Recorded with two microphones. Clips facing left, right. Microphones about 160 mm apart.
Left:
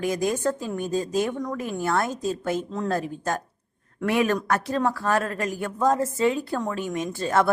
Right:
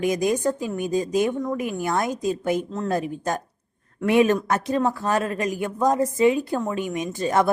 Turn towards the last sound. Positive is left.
turn(degrees=-15)  # may be behind; listen again after turning